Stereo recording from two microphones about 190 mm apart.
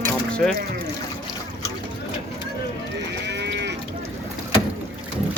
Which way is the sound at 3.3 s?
65° right (ahead or behind).